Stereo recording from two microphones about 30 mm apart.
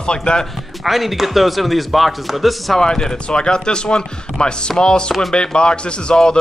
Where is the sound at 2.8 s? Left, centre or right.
Left.